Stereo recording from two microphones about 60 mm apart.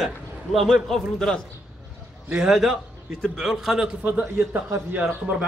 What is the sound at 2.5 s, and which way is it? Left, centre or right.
A man's voice, centre.